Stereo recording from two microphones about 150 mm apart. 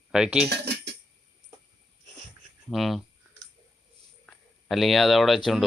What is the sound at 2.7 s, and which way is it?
Speech, centre (ahead or behind).